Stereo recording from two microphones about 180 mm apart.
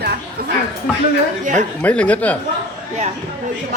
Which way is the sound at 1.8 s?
5° left (ahead or behind).